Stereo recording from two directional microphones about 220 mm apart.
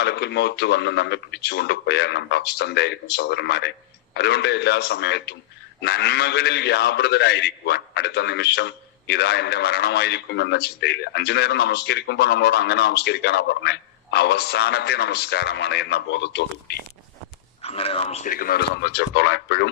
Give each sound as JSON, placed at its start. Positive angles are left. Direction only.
{"t": 0.0, "sound": "a man's voice", "side_deg": 50}
{"t": 17.6, "sound": "a man's voice", "side_deg": 25}